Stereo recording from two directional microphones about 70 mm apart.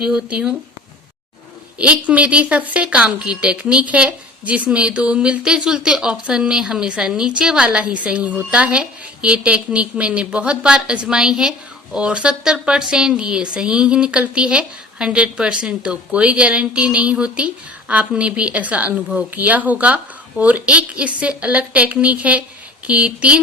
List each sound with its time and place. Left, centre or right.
0.0 s a woman's voice: centre
1.8 s a woman's voice: centre